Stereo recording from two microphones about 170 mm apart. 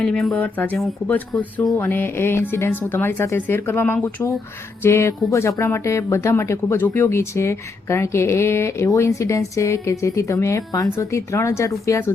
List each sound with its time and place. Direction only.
0.0 s speech: 5° left (ahead or behind)